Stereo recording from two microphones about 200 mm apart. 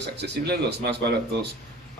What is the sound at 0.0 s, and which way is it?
Speech, 55° right (ahead or behind).